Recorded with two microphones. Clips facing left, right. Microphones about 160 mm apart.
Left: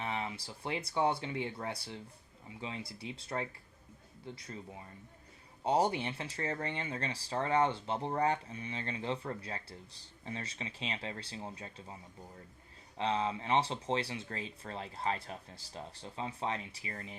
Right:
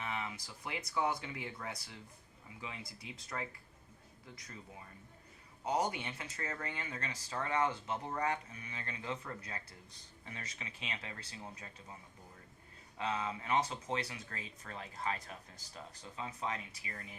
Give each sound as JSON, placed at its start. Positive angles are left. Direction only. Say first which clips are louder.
{"t": 0.0, "sound": "speech", "louder": "left 3 dB", "side_deg": 30}
{"t": 5.6, "sound": "speech", "louder": "left 5 dB", "side_deg": 30}
{"t": 13.0, "sound": "speech", "louder": "left 5 dB", "side_deg": 30}